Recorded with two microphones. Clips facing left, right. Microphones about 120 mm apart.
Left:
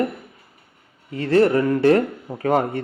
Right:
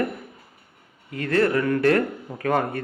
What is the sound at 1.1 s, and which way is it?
Speech, 30° left (ahead or behind).